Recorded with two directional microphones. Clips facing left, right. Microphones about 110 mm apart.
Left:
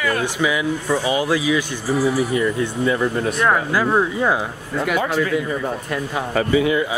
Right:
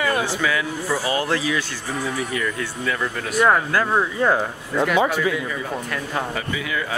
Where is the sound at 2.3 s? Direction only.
25° left (ahead or behind).